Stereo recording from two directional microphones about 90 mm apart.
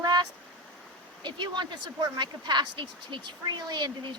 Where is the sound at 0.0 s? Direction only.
50° right (ahead or behind).